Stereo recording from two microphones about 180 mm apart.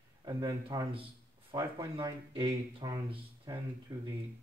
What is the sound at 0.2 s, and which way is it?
Speech, 25° right (ahead or behind).